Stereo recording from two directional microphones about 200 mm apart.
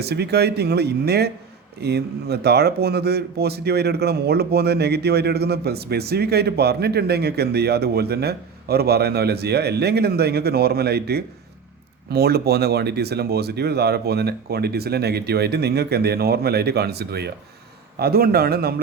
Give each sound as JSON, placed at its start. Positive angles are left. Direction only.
{"t": 0.0, "sound": "a man's voice", "side_deg": -55}